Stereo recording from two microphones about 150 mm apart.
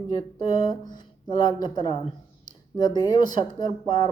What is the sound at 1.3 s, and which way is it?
Speech, 25° left (ahead or behind).